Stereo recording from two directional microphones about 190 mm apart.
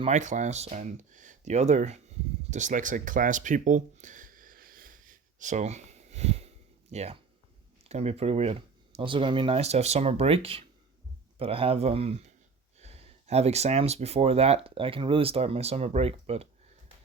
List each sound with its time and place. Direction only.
0.0 s speech: 40° right (ahead or behind)